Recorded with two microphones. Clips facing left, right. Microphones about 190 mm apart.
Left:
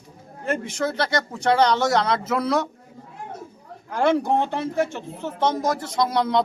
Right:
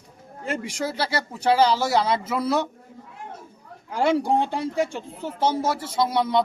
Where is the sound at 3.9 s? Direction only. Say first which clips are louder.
Left 1 dB; 10° right (ahead or behind).